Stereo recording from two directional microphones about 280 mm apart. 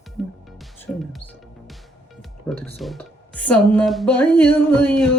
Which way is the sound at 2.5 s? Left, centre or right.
Centre.